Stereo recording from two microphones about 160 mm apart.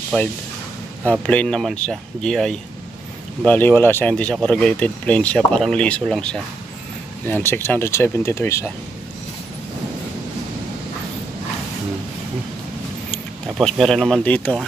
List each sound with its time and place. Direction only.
0.1 s speech: 5° left (ahead or behind)
13.1 s speech: centre (ahead or behind)